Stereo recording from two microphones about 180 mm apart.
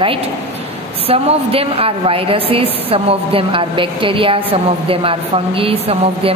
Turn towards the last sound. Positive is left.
turn(degrees=-30)  # may be behind; listen again after turning